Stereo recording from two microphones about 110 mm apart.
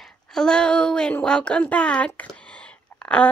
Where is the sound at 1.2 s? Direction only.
10° left (ahead or behind).